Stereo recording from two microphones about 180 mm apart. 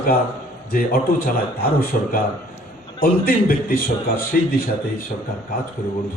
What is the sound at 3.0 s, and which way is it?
Speech, 50° left (ahead or behind).